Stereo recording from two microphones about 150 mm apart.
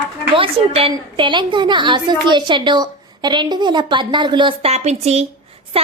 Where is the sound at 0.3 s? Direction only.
40° right (ahead or behind).